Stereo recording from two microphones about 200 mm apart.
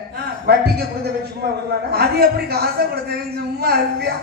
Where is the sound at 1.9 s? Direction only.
50° right (ahead or behind).